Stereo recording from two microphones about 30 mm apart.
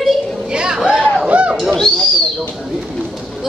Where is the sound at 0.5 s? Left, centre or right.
Right.